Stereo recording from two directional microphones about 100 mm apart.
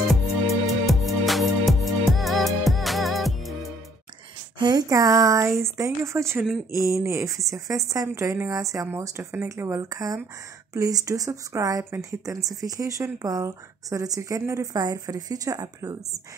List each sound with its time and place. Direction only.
0.7 s music: centre (ahead or behind)
4.6 s speech: 45° right (ahead or behind)